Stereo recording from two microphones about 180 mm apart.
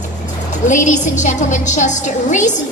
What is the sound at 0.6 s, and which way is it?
A woman's voice, 40° left (ahead or behind).